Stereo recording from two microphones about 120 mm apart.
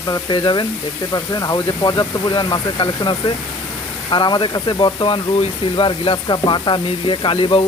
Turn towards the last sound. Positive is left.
turn(degrees=50)  # may be behind; listen again after turning